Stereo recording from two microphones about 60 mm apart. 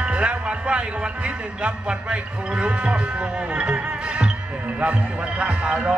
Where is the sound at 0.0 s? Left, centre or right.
Right.